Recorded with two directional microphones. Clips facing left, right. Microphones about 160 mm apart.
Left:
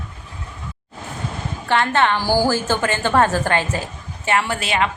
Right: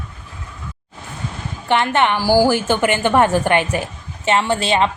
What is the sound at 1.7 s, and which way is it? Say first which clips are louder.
A woman's voice: right 1 dB; 20° right (ahead or behind).